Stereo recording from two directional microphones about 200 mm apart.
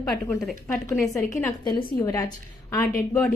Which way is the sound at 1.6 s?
20° left (ahead or behind).